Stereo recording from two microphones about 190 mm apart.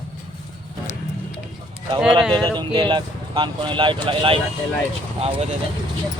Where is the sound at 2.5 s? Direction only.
25° right (ahead or behind).